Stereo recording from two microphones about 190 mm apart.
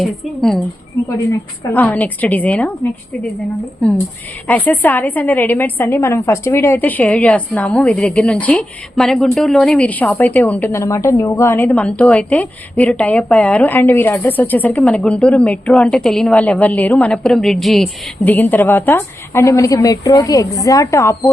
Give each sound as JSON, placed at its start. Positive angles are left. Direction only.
{"t": 0.0, "sound": "speech", "side_deg": 0}
{"t": 1.7, "sound": "a woman's voice", "side_deg": 10}
{"t": 4.4, "sound": "a woman's voice", "side_deg": 10}